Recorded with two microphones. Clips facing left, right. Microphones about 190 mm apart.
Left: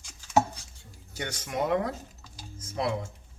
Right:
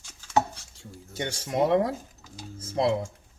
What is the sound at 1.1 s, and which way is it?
Speech, 30° right (ahead or behind).